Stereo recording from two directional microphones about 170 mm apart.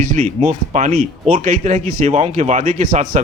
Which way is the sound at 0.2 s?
45° right (ahead or behind).